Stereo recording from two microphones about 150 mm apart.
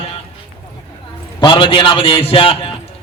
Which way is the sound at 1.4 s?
30° left (ahead or behind).